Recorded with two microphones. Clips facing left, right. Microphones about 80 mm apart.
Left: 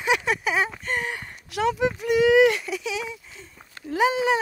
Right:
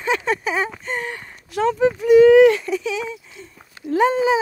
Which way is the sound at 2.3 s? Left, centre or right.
Centre.